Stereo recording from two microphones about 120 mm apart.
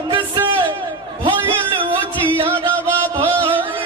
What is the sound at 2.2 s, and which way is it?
Music, 50° right (ahead or behind).